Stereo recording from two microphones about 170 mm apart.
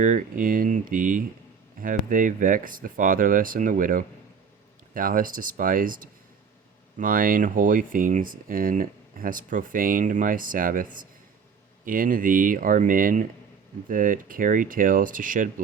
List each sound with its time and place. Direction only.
0.0 s speech: 50° right (ahead or behind)